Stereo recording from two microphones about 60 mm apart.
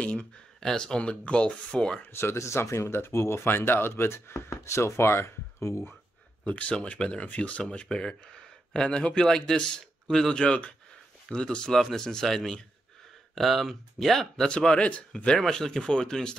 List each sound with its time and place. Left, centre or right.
0.0 s speech: centre
2.3 s speech: left
6.4 s speech: left
15.3 s speech: centre